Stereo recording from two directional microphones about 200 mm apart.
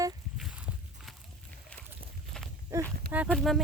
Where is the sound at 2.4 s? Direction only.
5° left (ahead or behind).